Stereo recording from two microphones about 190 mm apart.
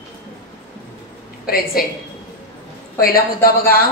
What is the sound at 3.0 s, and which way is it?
Speech, 50° left (ahead or behind).